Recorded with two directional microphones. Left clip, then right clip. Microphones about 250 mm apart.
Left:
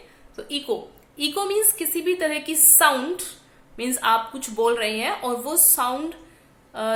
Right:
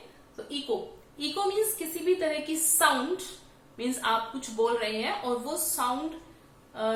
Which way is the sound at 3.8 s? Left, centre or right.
Left.